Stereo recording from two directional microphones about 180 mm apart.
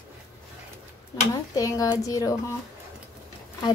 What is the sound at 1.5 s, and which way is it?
A woman's voice, 20° left (ahead or behind).